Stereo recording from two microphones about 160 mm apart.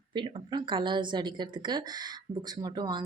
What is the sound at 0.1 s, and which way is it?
Speech, 30° right (ahead or behind).